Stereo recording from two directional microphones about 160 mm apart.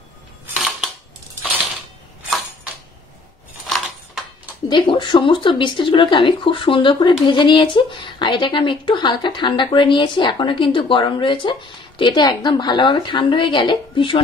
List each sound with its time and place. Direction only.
0.6 s dishes: centre (ahead or behind)
4.6 s speech: 30° left (ahead or behind)